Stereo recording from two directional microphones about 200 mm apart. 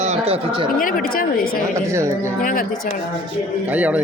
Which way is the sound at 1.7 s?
15° right (ahead or behind).